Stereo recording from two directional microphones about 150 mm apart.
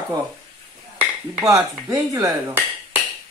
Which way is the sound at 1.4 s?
20° right (ahead or behind).